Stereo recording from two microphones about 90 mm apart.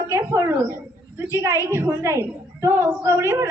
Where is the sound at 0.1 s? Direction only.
30° right (ahead or behind).